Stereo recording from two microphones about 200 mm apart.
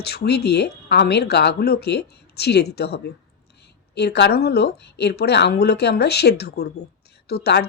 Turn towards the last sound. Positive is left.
turn(degrees=55)  # may be behind; listen again after turning